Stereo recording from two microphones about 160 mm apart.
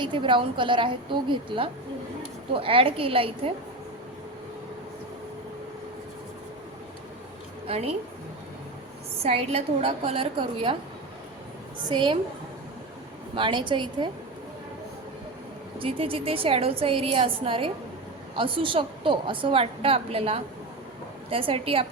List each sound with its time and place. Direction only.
0.0 s a woman's voice: 30° right (ahead or behind)
7.7 s a woman's voice: 40° right (ahead or behind)
9.2 s a woman's voice: 40° right (ahead or behind)
11.9 s a woman's voice: 30° right (ahead or behind)
13.3 s a woman's voice: 30° right (ahead or behind)
15.8 s a woman's voice: 35° right (ahead or behind)